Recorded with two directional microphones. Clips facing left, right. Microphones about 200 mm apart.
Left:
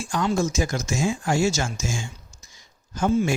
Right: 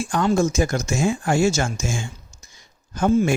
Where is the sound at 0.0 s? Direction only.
55° right (ahead or behind).